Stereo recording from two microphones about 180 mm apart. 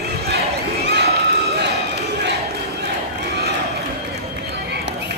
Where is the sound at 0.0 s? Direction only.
60° right (ahead or behind).